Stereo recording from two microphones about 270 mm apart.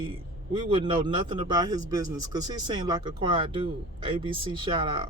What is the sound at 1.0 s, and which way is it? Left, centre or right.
Speech, centre.